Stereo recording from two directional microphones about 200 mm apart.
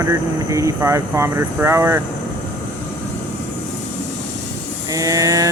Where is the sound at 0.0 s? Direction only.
15° right (ahead or behind).